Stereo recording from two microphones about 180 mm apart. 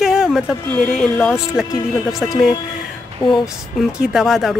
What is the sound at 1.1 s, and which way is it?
Speech, 10° left (ahead or behind).